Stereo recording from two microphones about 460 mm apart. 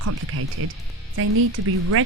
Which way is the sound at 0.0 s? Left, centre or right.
Right.